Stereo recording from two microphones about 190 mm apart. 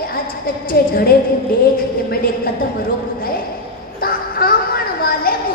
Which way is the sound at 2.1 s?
50° left (ahead or behind).